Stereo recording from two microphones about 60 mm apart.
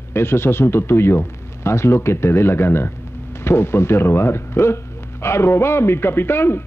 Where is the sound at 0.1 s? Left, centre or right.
Left.